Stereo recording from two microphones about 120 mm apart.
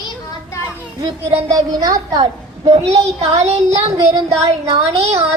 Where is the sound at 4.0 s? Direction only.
25° right (ahead or behind).